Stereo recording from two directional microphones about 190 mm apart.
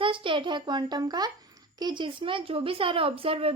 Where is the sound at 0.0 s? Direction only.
25° right (ahead or behind).